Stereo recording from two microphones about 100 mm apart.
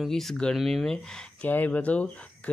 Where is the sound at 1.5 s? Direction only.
15° left (ahead or behind).